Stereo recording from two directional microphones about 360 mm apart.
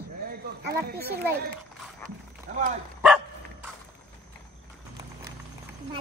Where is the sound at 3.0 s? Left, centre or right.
Centre.